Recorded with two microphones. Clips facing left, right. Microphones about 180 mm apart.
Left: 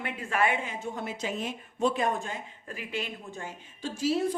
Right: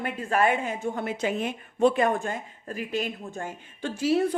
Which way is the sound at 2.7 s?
40° right (ahead or behind).